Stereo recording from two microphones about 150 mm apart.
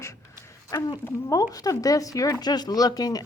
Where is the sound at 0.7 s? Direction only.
20° left (ahead or behind).